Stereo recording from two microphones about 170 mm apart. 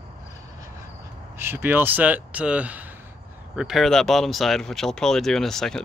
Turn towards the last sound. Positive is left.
turn(degrees=0)  # may be behind; listen again after turning